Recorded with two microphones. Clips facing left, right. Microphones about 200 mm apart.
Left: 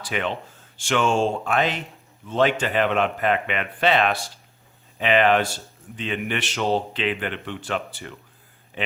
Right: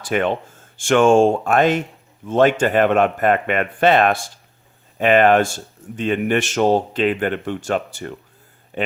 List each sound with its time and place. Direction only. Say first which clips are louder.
0.0 s a man's voice: right 7 dB; 50° right (ahead or behind)